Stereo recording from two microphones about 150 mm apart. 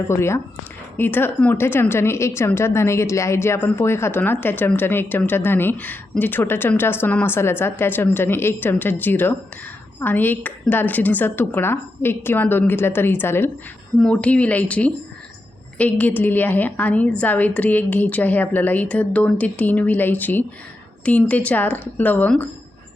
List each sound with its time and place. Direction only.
0.1 s a woman's voice: 20° left (ahead or behind)